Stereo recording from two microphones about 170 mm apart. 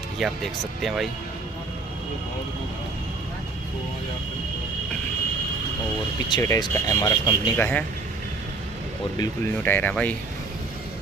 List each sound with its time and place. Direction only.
0.2 s speech: centre (ahead or behind)
6.2 s speech: 25° left (ahead or behind)
7.5 s speech: 10° left (ahead or behind)
9.2 s speech: 10° left (ahead or behind)